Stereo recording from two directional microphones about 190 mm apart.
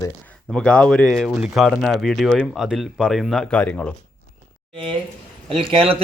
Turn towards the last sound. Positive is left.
turn(degrees=-30)  # may be behind; listen again after turning